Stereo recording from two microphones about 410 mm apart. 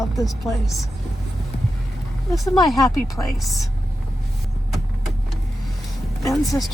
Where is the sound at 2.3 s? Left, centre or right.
Centre.